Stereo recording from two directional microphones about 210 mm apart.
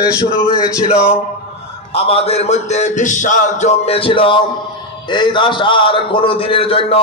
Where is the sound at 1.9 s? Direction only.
30° left (ahead or behind).